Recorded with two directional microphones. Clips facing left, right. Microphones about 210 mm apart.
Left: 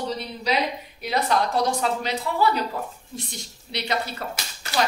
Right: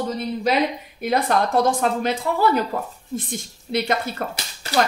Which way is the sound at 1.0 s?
50° right (ahead or behind).